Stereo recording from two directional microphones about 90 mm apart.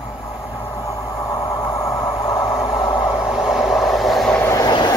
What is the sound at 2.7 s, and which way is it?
Vehicle, 55° left (ahead or behind).